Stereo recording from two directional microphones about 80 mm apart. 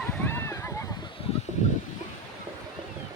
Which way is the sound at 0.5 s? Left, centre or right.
Left.